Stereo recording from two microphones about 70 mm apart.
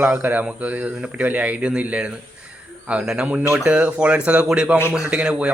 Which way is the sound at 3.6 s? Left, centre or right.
Right.